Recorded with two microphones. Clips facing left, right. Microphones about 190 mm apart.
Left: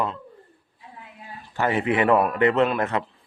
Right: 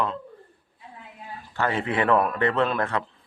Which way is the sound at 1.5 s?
15° left (ahead or behind).